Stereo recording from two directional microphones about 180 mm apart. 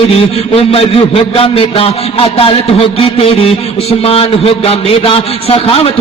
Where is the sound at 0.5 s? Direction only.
30° left (ahead or behind).